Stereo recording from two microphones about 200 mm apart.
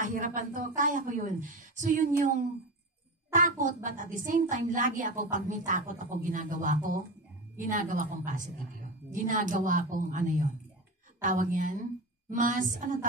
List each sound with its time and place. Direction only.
0.0 s a woman's voice: 40° right (ahead or behind)
3.3 s a woman's voice: 40° right (ahead or behind)